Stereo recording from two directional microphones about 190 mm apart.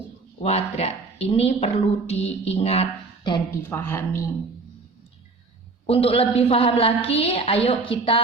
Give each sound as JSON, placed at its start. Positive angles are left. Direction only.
{"t": 0.4, "sound": "speech", "side_deg": 35}
{"t": 3.7, "sound": "speech", "side_deg": 10}
{"t": 5.8, "sound": "speech", "side_deg": 30}